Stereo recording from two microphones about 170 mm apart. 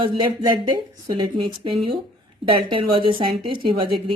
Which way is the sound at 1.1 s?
30° right (ahead or behind).